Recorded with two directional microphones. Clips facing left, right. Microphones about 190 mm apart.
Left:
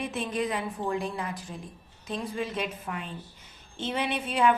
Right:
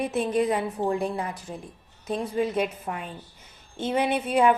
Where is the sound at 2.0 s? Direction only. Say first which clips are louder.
Right 6 dB; 50° right (ahead or behind).